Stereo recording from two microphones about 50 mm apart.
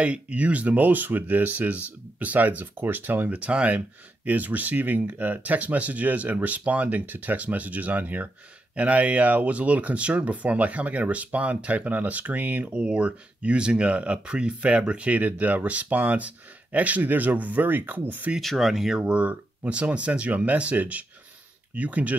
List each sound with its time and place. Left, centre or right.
0.0 s speech: right
3.3 s speech: right
12.8 s speech: right
18.4 s speech: centre
19.0 s speech: right